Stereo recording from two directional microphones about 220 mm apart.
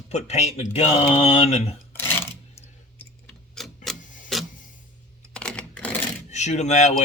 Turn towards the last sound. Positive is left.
turn(degrees=30)  # may be behind; listen again after turning